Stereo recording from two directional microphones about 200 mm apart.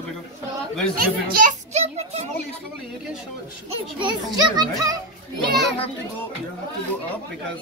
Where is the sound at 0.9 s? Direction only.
45° right (ahead or behind).